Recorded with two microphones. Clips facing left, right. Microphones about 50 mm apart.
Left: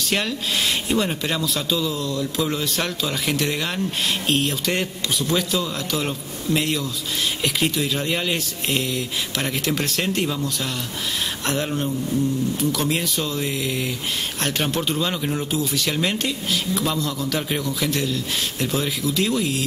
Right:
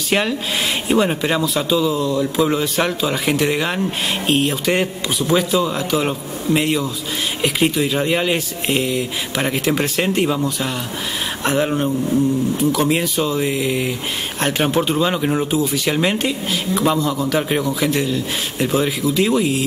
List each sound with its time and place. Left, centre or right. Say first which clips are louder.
0.1 s speech: right 5 dB; centre